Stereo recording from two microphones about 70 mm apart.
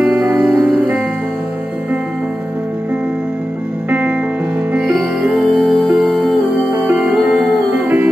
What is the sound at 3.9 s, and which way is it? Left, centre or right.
Music, right.